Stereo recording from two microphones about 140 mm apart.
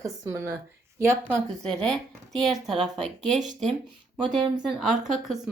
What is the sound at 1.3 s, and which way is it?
Speech, 5° left (ahead or behind).